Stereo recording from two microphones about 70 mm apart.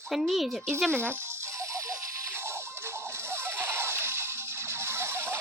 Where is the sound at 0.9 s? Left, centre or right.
Right.